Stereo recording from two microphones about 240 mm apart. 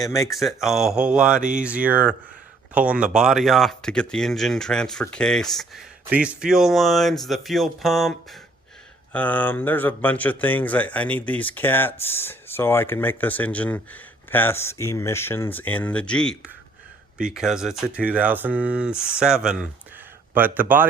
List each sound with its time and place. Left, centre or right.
0.3 s speech: centre